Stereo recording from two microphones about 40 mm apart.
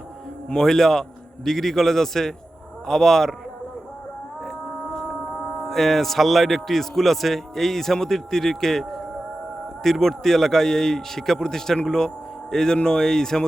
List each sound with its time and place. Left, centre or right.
0.4 s speech: centre
5.5 s a man's voice: centre